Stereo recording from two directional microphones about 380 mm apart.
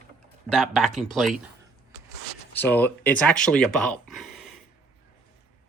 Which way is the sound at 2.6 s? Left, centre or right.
Centre.